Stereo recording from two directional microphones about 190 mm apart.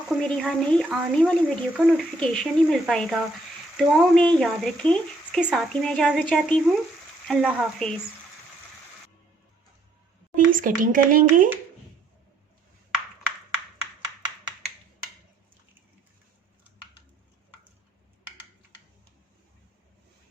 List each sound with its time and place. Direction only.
0.1 s a woman's voice: 5° left (ahead or behind)
10.3 s speech: 45° right (ahead or behind)